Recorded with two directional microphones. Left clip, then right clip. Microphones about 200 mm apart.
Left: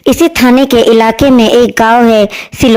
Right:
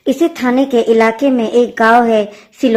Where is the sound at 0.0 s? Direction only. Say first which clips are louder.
Left 7 dB; 40° left (ahead or behind).